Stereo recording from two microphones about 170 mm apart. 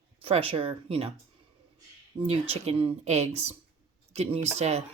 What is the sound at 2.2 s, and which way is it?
Speech, 35° right (ahead or behind).